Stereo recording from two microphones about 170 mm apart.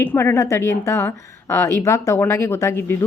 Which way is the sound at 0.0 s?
15° left (ahead or behind).